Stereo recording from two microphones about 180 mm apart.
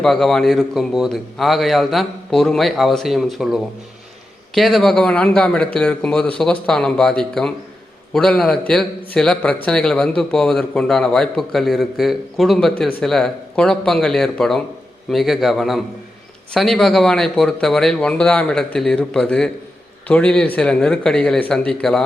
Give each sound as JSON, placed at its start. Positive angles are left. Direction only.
{"t": 0.0, "sound": "speech", "side_deg": 0}